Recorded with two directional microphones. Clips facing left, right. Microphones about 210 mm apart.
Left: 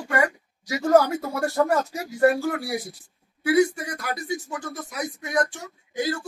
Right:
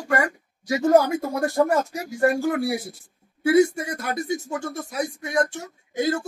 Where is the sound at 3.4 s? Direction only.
25° right (ahead or behind).